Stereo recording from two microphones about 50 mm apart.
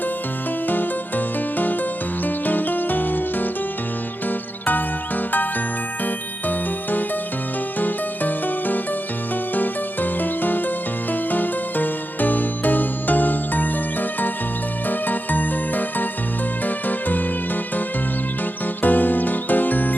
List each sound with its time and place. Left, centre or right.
0.7 s music: left
7.8 s music: left
14.8 s music: left
18.8 s music: left